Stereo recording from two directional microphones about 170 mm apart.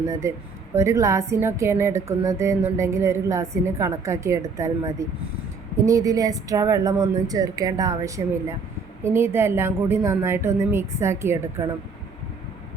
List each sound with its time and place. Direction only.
0.1 s a woman's voice: 15° right (ahead or behind)